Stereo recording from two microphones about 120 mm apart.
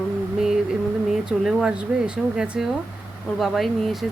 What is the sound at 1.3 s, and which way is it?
Speech, 5° right (ahead or behind).